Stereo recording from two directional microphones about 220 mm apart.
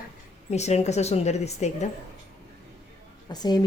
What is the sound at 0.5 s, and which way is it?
A woman's voice, 30° left (ahead or behind).